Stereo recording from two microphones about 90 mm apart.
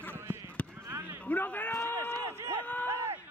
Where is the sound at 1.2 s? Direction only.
20° left (ahead or behind).